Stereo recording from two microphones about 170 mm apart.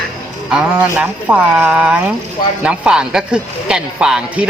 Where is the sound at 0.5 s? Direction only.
10° right (ahead or behind).